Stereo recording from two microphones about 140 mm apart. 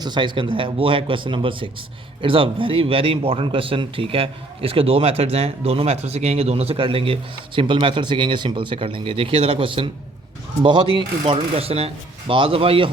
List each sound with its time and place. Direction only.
0.0 s a man's voice: 35° right (ahead or behind)